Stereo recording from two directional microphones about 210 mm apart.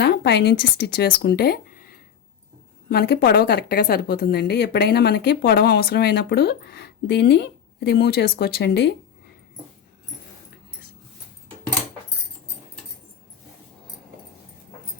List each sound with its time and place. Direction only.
0.0 s speech: 50° left (ahead or behind)